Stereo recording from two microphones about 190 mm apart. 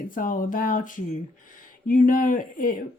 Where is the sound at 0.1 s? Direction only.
45° left (ahead or behind).